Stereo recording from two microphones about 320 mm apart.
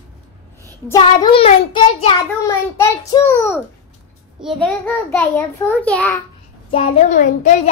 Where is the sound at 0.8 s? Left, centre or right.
Centre.